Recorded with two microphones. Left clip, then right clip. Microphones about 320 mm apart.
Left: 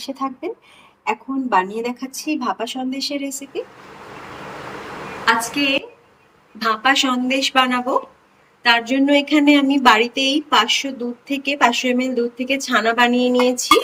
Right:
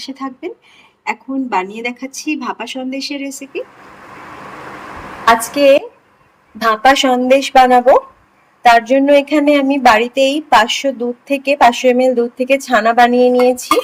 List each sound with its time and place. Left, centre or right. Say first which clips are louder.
1.0 s speech: right 2 dB; centre
5.2 s speech: right 8 dB; centre
8.9 s speech: right 6 dB; centre
13.1 s a sound: right 7 dB; centre
13.5 s speech: right 2 dB; centre